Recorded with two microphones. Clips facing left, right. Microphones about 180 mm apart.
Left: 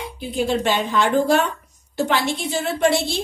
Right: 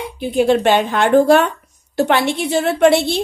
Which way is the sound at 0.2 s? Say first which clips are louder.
Right 7 dB; 65° right (ahead or behind).